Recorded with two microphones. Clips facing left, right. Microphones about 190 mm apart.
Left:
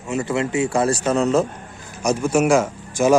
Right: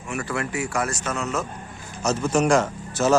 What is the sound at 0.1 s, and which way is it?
Speech, 20° left (ahead or behind).